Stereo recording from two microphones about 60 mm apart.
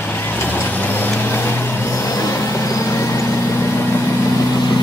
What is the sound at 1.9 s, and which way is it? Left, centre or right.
Vehicle, left.